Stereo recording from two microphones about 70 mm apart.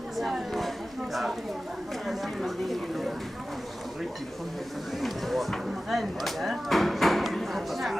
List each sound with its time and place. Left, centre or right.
0.2 s speech: centre
2.0 s speech: centre
5.0 s a sound: centre